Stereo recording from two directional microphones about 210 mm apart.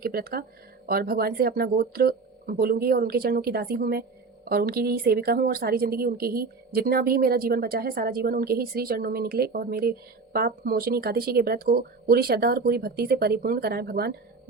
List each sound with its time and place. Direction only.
0.0 s a woman's voice: 45° right (ahead or behind)